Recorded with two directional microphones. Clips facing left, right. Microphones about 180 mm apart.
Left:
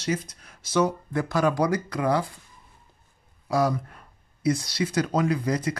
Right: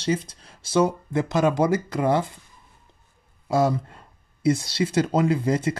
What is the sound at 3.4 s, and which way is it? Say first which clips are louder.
Speech: right 2 dB; 25° right (ahead or behind).